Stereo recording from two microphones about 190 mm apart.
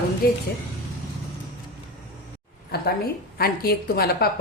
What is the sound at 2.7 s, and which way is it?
A woman's voice, 55° left (ahead or behind).